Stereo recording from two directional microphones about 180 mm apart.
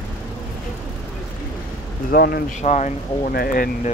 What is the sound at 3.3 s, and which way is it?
Speech, 55° left (ahead or behind).